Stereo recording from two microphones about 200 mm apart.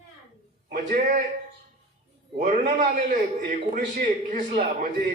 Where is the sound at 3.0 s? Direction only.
40° right (ahead or behind).